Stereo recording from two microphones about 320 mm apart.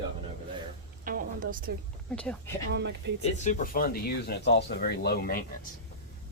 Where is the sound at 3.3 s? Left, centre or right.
Left.